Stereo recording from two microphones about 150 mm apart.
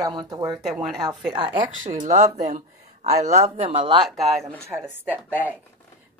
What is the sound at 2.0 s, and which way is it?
Speech, 55° right (ahead or behind).